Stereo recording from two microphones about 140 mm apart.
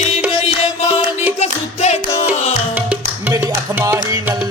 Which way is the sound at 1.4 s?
50° left (ahead or behind).